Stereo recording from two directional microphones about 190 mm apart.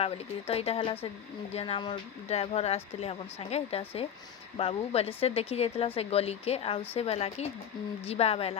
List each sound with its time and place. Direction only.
0.0 s speech: 30° left (ahead or behind)